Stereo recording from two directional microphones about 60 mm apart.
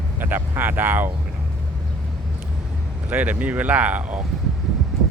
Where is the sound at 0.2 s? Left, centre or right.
Right.